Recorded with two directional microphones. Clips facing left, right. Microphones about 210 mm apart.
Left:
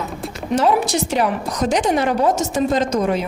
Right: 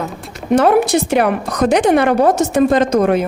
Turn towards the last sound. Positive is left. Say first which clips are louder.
# right 5 dB
turn(degrees=-55)  # may be behind; listen again after turning